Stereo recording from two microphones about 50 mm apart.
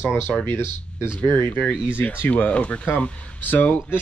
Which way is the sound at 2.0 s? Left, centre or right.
Left.